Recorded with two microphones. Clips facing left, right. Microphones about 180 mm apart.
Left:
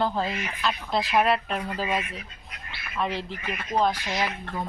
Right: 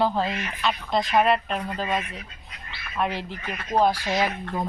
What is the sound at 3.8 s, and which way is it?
Speech, 15° right (ahead or behind).